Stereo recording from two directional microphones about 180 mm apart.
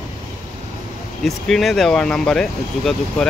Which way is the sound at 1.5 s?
Centre (ahead or behind).